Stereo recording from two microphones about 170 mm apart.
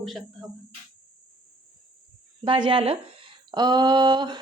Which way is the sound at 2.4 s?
30° right (ahead or behind).